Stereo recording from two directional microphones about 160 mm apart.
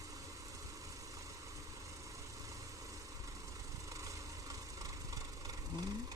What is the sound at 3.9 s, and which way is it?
Vehicle, 20° right (ahead or behind).